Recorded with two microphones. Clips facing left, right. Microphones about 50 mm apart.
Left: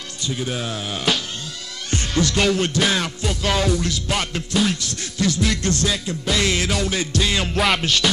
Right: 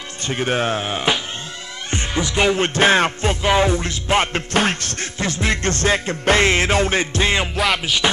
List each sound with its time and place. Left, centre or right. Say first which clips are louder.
0.3 s music: right 7 dB; right
5.2 s music: even; right
7.5 s music: even; centre